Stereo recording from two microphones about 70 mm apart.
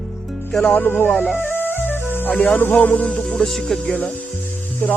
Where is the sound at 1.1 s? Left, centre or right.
Centre.